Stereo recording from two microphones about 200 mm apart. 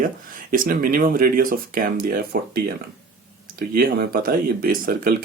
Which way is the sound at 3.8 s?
50° right (ahead or behind).